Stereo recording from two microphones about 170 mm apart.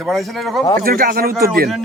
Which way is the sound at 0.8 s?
60° right (ahead or behind).